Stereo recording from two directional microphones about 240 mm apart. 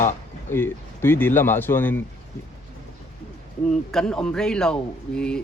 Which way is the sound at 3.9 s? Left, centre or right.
Centre.